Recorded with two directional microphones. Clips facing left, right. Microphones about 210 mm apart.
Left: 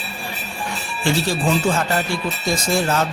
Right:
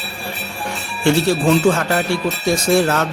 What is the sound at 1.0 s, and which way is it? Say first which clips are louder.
A man's voice: right 5 dB; 70° right (ahead or behind).